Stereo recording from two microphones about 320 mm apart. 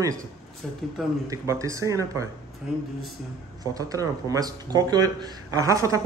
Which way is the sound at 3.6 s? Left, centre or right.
Centre.